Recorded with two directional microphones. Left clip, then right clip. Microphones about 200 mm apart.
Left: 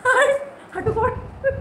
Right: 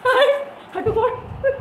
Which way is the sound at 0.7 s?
25° right (ahead or behind).